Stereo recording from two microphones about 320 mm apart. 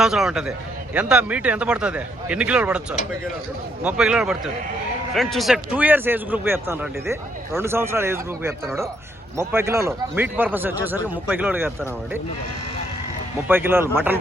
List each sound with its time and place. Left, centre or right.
0.0 s speech: centre
3.8 s a man's voice: centre
13.5 s a man's voice: centre